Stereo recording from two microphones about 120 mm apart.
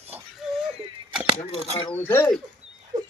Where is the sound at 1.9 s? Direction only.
15° left (ahead or behind).